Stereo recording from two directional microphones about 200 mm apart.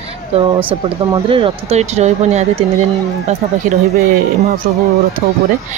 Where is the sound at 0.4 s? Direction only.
25° right (ahead or behind).